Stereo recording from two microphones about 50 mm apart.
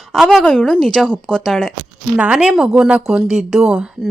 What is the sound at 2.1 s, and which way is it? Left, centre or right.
A woman's voice, right.